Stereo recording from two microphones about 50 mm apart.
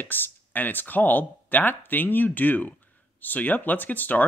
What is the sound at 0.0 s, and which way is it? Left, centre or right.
Speech, left.